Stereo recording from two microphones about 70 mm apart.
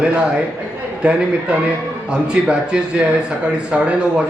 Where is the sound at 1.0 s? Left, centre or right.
Centre.